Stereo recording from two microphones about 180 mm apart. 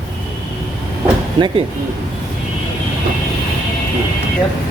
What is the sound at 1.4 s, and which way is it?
Speech, 25° right (ahead or behind).